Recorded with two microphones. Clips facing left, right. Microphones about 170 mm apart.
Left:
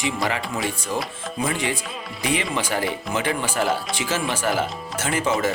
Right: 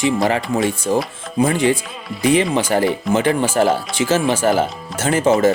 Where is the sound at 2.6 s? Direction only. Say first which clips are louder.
Right 8 dB; 45° right (ahead or behind).